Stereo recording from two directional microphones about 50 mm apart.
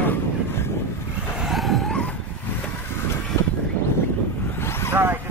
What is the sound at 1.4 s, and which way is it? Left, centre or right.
Vehicle, centre.